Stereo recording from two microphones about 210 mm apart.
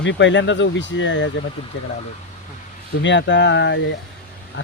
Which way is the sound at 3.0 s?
60° left (ahead or behind).